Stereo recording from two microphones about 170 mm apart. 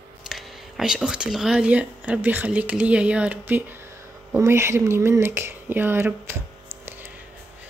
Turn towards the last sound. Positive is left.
turn(degrees=-15)  # may be behind; listen again after turning